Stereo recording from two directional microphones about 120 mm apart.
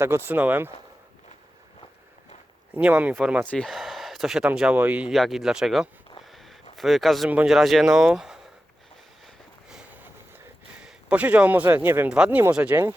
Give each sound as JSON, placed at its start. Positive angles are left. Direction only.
{"t": 0.0, "sound": "speech", "side_deg": -20}
{"t": 2.7, "sound": "speech", "side_deg": -15}
{"t": 3.4, "sound": "speech", "side_deg": 10}
{"t": 5.1, "sound": "speech", "side_deg": 0}
{"t": 6.2, "sound": "a sound", "side_deg": 0}
{"t": 7.3, "sound": "speech", "side_deg": -10}
{"t": 7.5, "sound": "speech", "side_deg": 0}
{"t": 9.2, "sound": "a sound", "side_deg": -5}
{"t": 10.8, "sound": "speech", "side_deg": -10}